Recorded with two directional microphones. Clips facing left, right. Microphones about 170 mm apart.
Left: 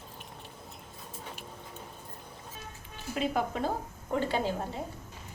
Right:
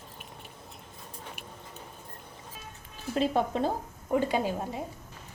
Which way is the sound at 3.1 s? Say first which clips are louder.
Right 4 dB; 25° right (ahead or behind).